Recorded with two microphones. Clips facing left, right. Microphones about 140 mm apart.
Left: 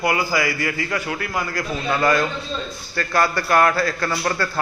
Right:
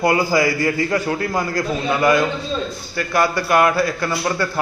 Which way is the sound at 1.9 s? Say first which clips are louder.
Right 2 dB; 15° right (ahead or behind).